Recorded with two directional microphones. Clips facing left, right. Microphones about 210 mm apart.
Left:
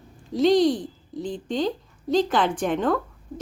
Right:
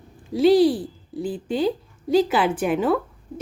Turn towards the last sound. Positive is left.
turn(degrees=-5)  # may be behind; listen again after turning